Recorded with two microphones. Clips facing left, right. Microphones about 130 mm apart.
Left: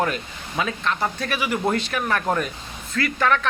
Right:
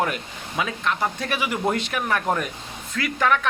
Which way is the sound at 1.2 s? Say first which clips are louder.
Left 2 dB; 20° right (ahead or behind).